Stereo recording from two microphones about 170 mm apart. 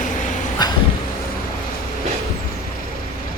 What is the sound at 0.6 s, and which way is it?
Vehicle, 25° left (ahead or behind).